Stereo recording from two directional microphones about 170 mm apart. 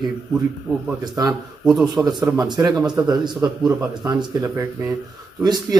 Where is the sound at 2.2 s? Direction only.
20° right (ahead or behind).